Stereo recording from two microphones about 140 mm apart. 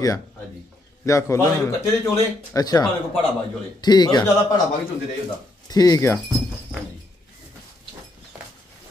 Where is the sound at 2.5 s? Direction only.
25° left (ahead or behind).